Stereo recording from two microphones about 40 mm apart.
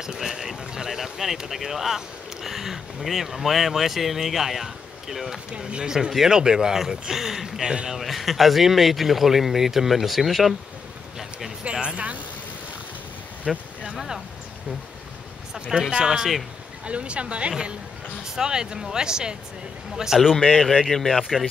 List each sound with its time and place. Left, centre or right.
0.0 s speech: centre
7.9 s speech: centre
11.7 s speech: right
13.5 s speech: centre
13.9 s speech: centre
15.9 s speech: centre
16.8 s speech: right; by 20.3 s centre
20.9 s speech: centre
21.2 s speech: centre